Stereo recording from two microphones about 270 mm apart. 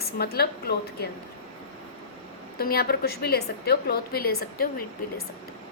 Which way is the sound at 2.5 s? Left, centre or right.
Left.